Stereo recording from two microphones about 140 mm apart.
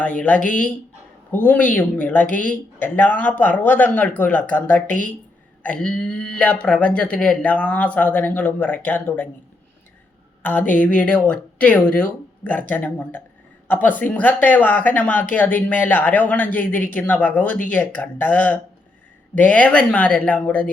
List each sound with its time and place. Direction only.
0.0 s speech: 10° left (ahead or behind)
0.3 s speech: 70° left (ahead or behind)
1.5 s speech: 10° left (ahead or behind)
5.6 s speech: 10° left (ahead or behind)
10.4 s speech: 10° left (ahead or behind)